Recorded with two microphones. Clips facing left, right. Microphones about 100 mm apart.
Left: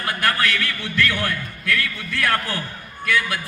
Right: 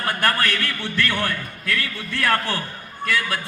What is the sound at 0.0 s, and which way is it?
A man's voice, 40° right (ahead or behind).